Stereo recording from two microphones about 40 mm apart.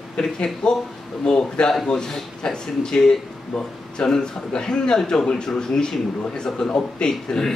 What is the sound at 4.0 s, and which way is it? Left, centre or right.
A man's voice, centre.